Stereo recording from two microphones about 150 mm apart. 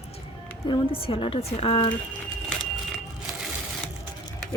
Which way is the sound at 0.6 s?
35° left (ahead or behind).